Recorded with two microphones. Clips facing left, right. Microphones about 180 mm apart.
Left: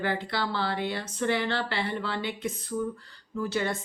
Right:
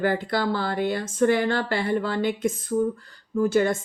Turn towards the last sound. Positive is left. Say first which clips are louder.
# right 8 dB
turn(degrees=-45)  # may be behind; listen again after turning